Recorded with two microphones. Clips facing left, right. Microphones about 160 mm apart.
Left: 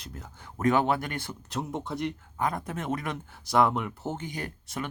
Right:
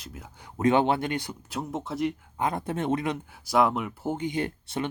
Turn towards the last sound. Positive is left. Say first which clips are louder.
# right 6 dB
turn(degrees=-25)  # may be behind; listen again after turning